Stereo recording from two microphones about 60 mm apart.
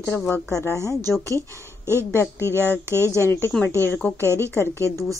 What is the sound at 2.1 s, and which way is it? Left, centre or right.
Speech, left.